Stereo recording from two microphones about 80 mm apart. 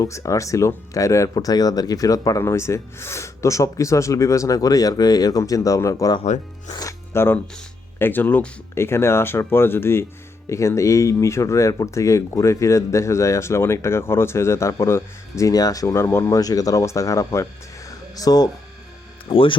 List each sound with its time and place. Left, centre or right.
0.0 s speech: left
2.4 s speech: left
7.1 s speech: left
16.0 s speech: left
16.4 s speech: left
19.3 s speech: left